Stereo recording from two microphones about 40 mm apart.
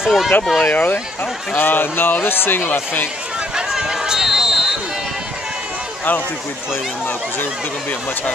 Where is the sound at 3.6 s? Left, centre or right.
Centre.